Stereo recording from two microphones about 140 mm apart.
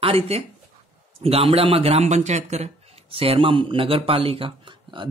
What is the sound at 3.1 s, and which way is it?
Speech, 40° right (ahead or behind).